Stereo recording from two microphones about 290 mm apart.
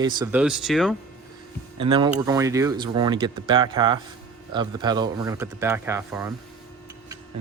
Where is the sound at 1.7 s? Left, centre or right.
Centre.